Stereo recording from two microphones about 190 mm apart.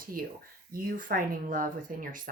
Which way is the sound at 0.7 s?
45° right (ahead or behind).